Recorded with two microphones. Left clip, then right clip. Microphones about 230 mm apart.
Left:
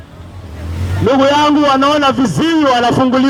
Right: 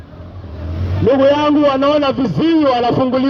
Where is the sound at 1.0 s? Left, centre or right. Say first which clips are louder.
Left 1 dB; left.